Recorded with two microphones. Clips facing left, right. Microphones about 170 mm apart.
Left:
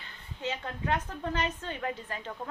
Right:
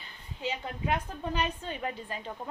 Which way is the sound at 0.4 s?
15° right (ahead or behind).